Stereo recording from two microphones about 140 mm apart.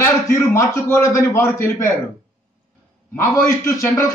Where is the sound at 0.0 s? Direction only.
15° left (ahead or behind).